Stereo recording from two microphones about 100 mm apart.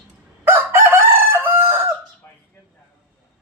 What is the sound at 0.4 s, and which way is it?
Chicken, 25° right (ahead or behind).